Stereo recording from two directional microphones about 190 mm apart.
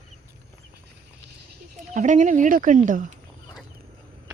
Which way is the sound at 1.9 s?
40° right (ahead or behind).